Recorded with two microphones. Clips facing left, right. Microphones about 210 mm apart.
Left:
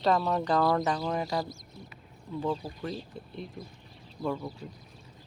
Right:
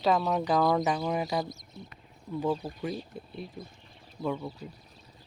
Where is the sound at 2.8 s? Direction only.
10° right (ahead or behind).